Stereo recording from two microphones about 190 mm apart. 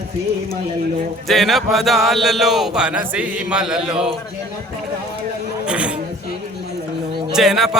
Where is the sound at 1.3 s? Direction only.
Centre (ahead or behind).